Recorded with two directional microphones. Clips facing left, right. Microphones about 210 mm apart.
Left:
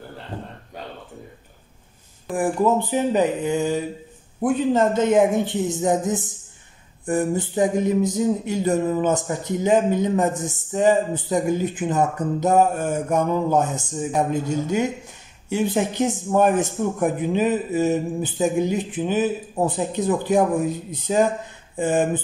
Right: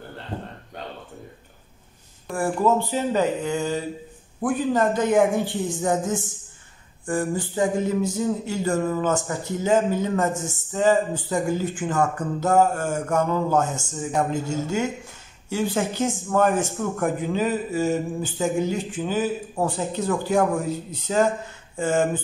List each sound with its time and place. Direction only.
2.3 s speech: 15° left (ahead or behind)
4.4 s a sound: 25° left (ahead or behind)
20.9 s speech: 15° left (ahead or behind)